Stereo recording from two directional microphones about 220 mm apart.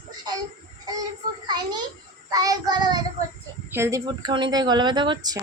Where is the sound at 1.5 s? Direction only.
20° right (ahead or behind).